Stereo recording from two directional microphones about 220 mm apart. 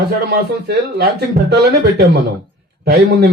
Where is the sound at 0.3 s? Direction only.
45° right (ahead or behind).